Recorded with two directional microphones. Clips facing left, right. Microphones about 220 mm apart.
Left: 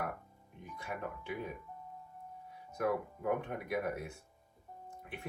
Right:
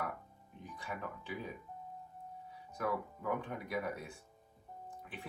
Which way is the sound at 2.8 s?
50° left (ahead or behind).